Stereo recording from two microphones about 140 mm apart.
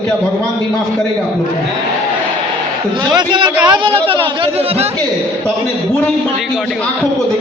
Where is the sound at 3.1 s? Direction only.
35° right (ahead or behind).